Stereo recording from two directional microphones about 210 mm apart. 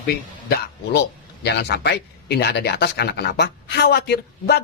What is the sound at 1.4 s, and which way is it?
Speech, 50° left (ahead or behind).